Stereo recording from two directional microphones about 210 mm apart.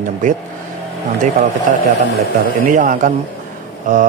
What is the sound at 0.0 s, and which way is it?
Speech, 40° right (ahead or behind).